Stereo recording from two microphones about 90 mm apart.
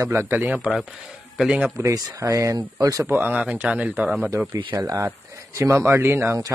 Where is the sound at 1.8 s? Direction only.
35° right (ahead or behind).